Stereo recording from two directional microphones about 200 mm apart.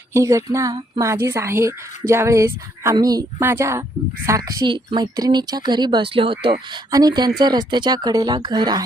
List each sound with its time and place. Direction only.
0.1 s a woman's voice: 15° right (ahead or behind)